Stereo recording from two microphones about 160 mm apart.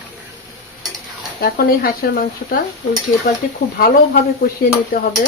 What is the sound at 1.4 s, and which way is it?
Speech, 70° left (ahead or behind).